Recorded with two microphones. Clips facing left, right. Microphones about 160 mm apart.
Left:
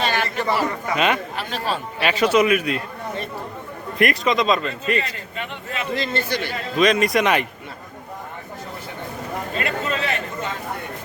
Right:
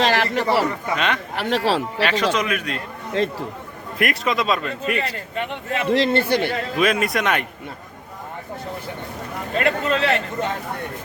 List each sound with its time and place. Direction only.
0.0 s a sound: 90° right
0.9 s a man's voice: 10° left (ahead or behind)
1.4 s a man's voice: 70° right (ahead or behind)
2.0 s a man's voice: 10° left (ahead or behind)
3.9 s speech: centre (ahead or behind)
5.7 s a man's voice: 65° right (ahead or behind)
6.7 s speech: 10° right (ahead or behind)
9.6 s a man's voice: 60° right (ahead or behind)